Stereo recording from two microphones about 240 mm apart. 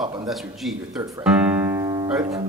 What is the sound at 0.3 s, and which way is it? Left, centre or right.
A man's voice, centre.